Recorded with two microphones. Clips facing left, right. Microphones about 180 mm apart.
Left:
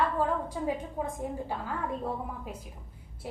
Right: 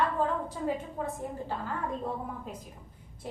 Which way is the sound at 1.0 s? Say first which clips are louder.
Left 1 dB; 15° left (ahead or behind).